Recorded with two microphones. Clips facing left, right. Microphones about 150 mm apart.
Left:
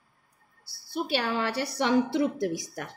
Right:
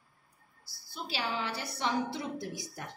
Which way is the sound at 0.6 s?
65° left (ahead or behind).